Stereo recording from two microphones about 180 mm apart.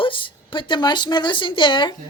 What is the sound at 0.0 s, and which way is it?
A woman's voice, 30° left (ahead or behind).